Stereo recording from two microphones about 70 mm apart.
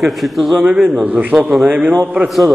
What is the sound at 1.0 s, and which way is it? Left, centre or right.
Speech, centre.